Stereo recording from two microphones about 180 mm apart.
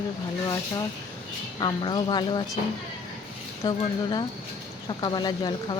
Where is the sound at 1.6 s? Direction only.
25° left (ahead or behind).